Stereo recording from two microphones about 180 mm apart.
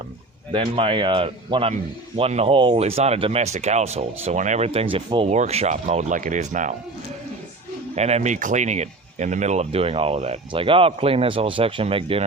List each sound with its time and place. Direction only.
0.5 s speech: 30° right (ahead or behind)
7.9 s speech: 35° right (ahead or behind)